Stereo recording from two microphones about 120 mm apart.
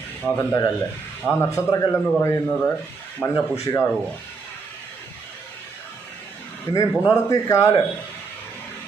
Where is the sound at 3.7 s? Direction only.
35° left (ahead or behind).